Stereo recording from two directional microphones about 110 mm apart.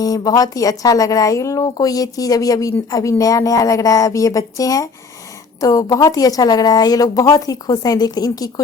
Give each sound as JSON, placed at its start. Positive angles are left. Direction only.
{"t": 0.0, "sound": "a woman's voice", "side_deg": 35}